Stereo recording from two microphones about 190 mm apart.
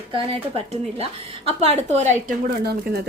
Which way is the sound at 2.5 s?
55° right (ahead or behind).